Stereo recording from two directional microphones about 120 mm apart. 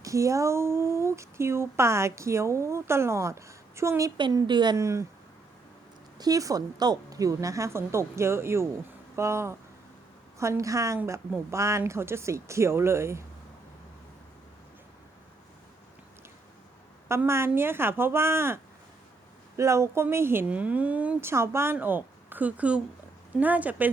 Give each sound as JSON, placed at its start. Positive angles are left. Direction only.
{"t": 0.0, "sound": "speech", "side_deg": -25}
{"t": 4.2, "sound": "a woman's voice", "side_deg": -35}
{"t": 4.8, "sound": "speech", "side_deg": -25}
{"t": 6.1, "sound": "speech", "side_deg": -30}
{"t": 17.1, "sound": "speech", "side_deg": -20}